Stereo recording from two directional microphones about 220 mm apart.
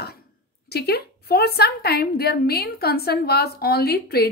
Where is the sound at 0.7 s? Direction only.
45° left (ahead or behind).